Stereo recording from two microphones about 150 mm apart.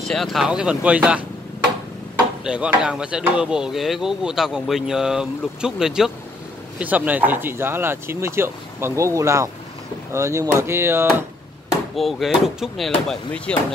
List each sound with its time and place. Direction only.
0.1 s speech: centre (ahead or behind)
2.4 s speech: 5° right (ahead or behind)
11.9 s speech: centre (ahead or behind)